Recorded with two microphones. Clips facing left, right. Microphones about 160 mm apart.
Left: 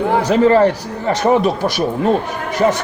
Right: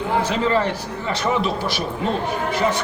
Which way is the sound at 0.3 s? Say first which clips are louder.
Left 9 dB; 45° left (ahead or behind).